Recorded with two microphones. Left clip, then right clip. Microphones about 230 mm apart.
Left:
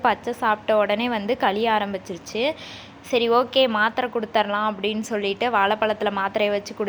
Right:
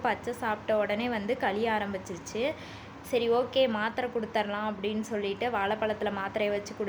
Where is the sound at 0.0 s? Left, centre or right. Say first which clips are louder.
Left 9 dB; centre.